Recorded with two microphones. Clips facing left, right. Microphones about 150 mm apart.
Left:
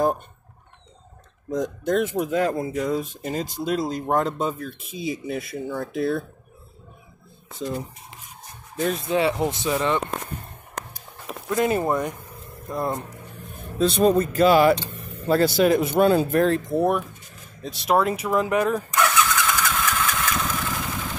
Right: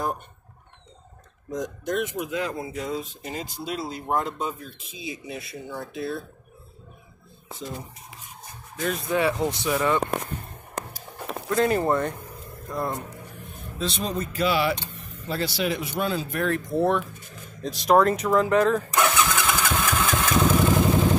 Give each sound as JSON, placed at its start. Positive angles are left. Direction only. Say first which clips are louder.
{"t": 2.1, "sound": "speech", "louder": "left 6 dB", "side_deg": 45}
{"t": 4.9, "sound": "speech", "louder": "left 7 dB", "side_deg": 75}
{"t": 8.7, "sound": "speech", "louder": "left 4 dB", "side_deg": 35}
{"t": 9.1, "sound": "speech", "louder": "even", "side_deg": 20}
{"t": 11.5, "sound": "speech", "louder": "even", "side_deg": 15}
{"t": 12.4, "sound": "vehicle", "louder": "left 3 dB", "side_deg": 20}
{"t": 13.7, "sound": "speech", "louder": "left 10 dB", "side_deg": 55}
{"t": 16.3, "sound": "speech", "louder": "left 6 dB", "side_deg": 35}
{"t": 17.6, "sound": "speech", "louder": "right 2 dB", "side_deg": 0}
{"t": 18.9, "sound": "engine starting", "louder": "left 1 dB", "side_deg": -20}
{"t": 20.0, "sound": "vehicle", "louder": "right 3 dB", "side_deg": -20}
{"t": 20.5, "sound": "motorcycle", "louder": "right 9 dB", "side_deg": -30}